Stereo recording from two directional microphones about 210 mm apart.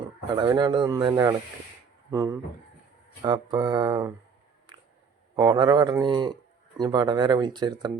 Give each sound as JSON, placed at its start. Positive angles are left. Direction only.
{"t": 0.3, "sound": "speech", "side_deg": -20}
{"t": 4.7, "sound": "a sound", "side_deg": -20}
{"t": 5.4, "sound": "speech", "side_deg": -20}